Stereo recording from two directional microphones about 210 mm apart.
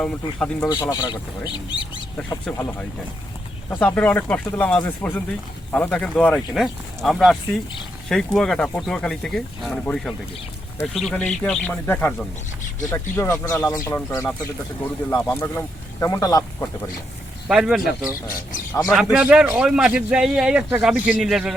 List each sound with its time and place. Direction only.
0.0 s a man's voice: 5° left (ahead or behind)
0.7 s a man's voice: 20° left (ahead or behind)
17.5 s a man's voice: centre (ahead or behind)
19.1 s a man's voice: 5° right (ahead or behind)